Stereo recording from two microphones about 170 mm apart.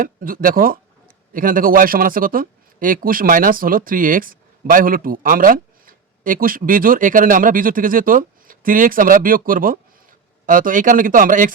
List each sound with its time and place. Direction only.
0.0 s speech: 55° right (ahead or behind)